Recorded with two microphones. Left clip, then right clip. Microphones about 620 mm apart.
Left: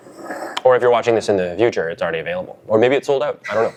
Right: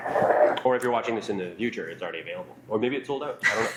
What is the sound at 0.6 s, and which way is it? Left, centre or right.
Speech, left.